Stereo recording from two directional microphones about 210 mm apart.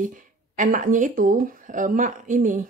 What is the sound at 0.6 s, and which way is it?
Speech, 40° right (ahead or behind).